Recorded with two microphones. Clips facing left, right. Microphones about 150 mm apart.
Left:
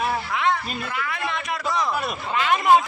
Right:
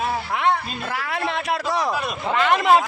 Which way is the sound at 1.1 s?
70° right (ahead or behind).